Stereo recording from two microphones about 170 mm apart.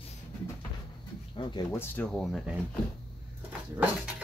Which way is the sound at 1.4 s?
25° left (ahead or behind).